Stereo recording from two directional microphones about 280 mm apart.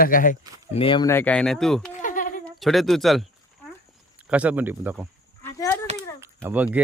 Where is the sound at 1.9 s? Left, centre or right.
Left.